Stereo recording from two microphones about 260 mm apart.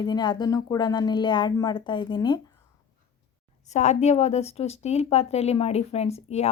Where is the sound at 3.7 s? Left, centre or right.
Left.